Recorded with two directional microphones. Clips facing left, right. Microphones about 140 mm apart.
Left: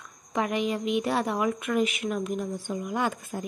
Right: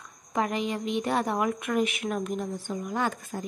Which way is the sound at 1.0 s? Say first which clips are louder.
Right 2 dB; centre (ahead or behind).